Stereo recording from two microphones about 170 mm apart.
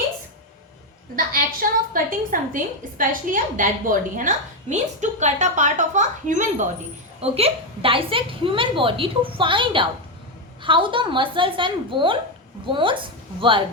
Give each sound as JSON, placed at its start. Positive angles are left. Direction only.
{"t": 1.1, "sound": "a woman's voice", "side_deg": -55}
{"t": 7.2, "sound": "a woman's voice", "side_deg": -35}